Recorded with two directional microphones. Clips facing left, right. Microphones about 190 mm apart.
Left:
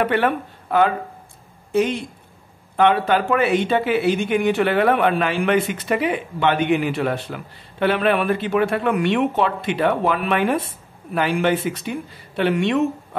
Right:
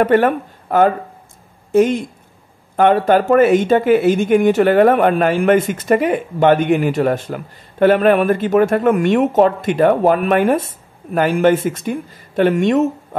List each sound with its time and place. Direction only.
0.0 s speech: 45° right (ahead or behind)